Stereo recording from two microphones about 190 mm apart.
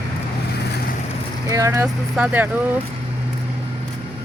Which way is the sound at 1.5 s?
15° right (ahead or behind).